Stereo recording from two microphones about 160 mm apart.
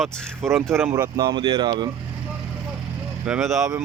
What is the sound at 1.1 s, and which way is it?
Speech, 25° right (ahead or behind).